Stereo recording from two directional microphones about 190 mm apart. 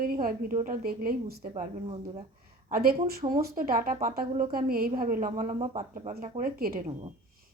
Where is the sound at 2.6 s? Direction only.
50° right (ahead or behind).